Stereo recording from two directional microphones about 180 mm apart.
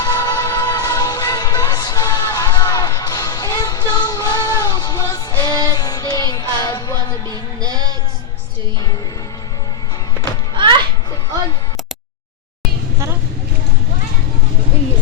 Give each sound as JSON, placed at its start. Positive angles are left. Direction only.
{"t": 0.0, "sound": "music", "side_deg": 20}
{"t": 7.3, "sound": "music", "side_deg": -20}
{"t": 10.5, "sound": "children playing", "side_deg": -25}